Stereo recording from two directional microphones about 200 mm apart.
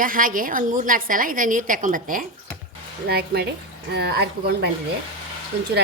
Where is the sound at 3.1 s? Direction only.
50° right (ahead or behind).